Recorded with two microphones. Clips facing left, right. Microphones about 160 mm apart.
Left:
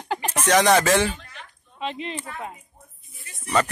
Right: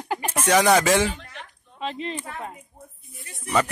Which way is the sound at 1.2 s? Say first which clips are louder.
Right 3 dB; 65° right (ahead or behind).